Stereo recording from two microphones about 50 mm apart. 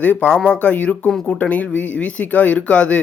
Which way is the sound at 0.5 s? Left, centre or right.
Left.